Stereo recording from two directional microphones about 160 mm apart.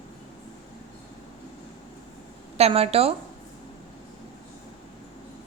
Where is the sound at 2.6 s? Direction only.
40° right (ahead or behind).